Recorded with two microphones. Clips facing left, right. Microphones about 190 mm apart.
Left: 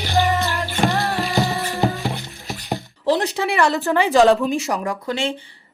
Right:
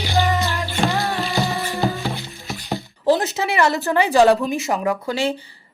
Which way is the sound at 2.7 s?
Centre (ahead or behind).